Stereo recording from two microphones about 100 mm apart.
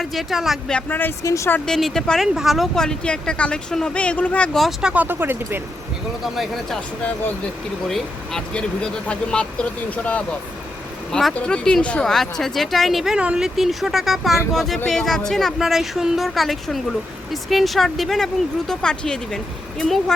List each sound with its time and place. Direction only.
0.0 s speech: centre (ahead or behind)
0.7 s speech: 15° left (ahead or behind)
1.2 s speech: 35° left (ahead or behind)
1.6 s speech: 5° left (ahead or behind)
5.0 s speech: 20° right (ahead or behind)
6.2 s speech: centre (ahead or behind)
7.9 s speech: 5° left (ahead or behind)
11.1 s speech: centre (ahead or behind)